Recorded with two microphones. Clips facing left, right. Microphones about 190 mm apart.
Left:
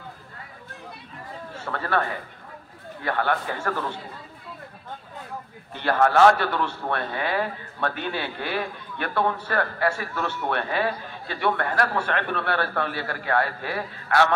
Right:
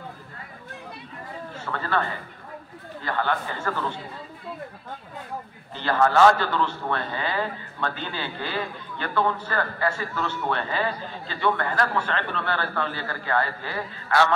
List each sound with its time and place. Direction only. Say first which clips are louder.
3.0 s a man's voice: left 1 dB; 60° left (ahead or behind)
5.8 s a man's voice: left 1 dB; 60° left (ahead or behind)